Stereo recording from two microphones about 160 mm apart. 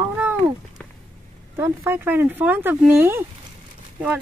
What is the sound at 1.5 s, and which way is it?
Speech, 15° right (ahead or behind).